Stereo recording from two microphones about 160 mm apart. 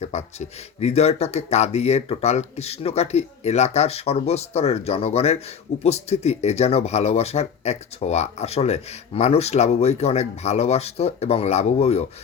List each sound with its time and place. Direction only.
0.0 s speech: 45° left (ahead or behind)